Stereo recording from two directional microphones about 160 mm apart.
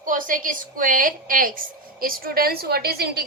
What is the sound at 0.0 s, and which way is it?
A woman's voice, 55° right (ahead or behind).